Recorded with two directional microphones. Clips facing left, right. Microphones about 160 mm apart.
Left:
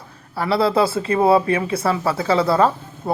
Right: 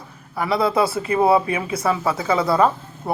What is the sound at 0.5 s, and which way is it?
Speech, 30° left (ahead or behind).